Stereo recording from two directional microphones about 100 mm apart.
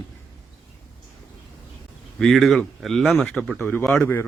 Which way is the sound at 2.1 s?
Centre (ahead or behind).